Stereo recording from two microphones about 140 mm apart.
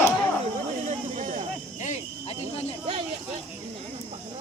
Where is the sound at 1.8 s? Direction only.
50° left (ahead or behind).